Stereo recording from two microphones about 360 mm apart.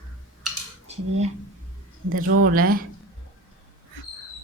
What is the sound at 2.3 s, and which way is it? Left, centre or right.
Speech, right.